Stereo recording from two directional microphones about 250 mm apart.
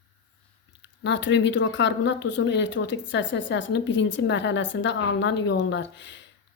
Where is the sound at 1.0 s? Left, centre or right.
Left.